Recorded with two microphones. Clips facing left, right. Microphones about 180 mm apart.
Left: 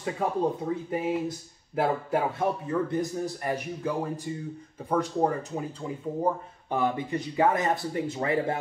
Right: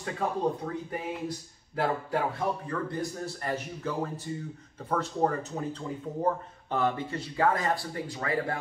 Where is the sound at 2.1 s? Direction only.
20° left (ahead or behind).